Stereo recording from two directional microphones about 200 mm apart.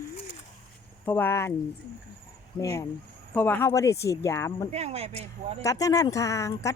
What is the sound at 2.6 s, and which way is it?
Speech, 15° left (ahead or behind).